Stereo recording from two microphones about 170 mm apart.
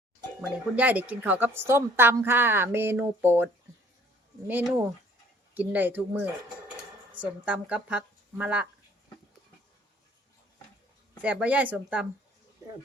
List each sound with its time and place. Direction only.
0.8 s a woman's voice: 10° right (ahead or behind)
11.2 s a woman's voice: 10° right (ahead or behind)